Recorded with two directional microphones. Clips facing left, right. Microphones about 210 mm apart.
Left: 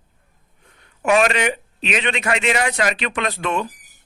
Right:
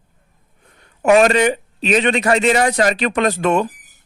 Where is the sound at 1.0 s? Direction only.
40° right (ahead or behind).